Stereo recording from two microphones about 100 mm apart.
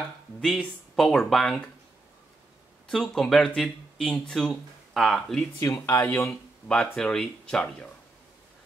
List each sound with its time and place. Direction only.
0.4 s speech: 5° left (ahead or behind)
2.9 s speech: 5° left (ahead or behind)
5.6 s speech: 30° left (ahead or behind)
6.7 s speech: 10° left (ahead or behind)